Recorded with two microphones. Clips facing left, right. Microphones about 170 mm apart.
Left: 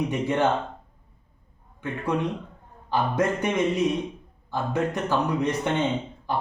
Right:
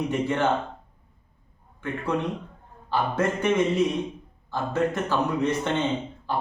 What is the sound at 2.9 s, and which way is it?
Speech, 15° left (ahead or behind).